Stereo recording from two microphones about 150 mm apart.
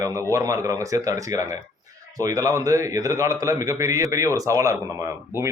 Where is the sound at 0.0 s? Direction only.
20° right (ahead or behind).